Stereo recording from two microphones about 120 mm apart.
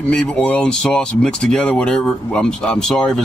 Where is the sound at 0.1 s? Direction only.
5° left (ahead or behind).